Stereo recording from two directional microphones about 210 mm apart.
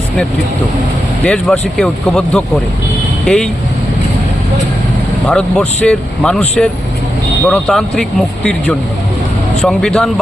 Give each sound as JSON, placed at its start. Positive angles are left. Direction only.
{"t": 1.2, "sound": "speech", "side_deg": 5}
{"t": 5.2, "sound": "speech", "side_deg": 5}
{"t": 9.6, "sound": "speech", "side_deg": 0}